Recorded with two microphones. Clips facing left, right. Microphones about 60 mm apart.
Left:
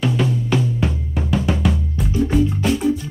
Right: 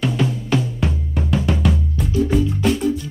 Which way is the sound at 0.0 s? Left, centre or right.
Centre.